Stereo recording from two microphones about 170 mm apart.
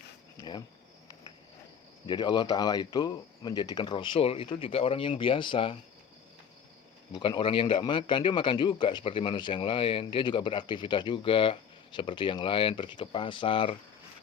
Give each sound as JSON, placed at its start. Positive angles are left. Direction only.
{"t": 0.3, "sound": "cricket", "side_deg": 25}
{"t": 2.0, "sound": "a man's voice", "side_deg": 25}
{"t": 7.1, "sound": "a man's voice", "side_deg": 30}